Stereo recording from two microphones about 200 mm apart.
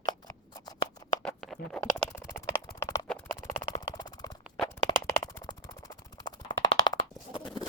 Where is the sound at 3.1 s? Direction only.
10° left (ahead or behind).